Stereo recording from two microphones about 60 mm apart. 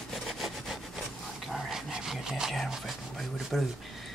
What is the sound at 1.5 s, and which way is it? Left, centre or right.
Dog, centre.